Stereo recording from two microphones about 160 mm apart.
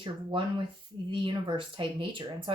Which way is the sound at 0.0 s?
30° right (ahead or behind).